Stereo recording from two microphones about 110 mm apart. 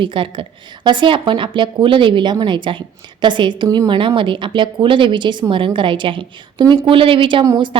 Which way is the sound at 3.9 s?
50° right (ahead or behind).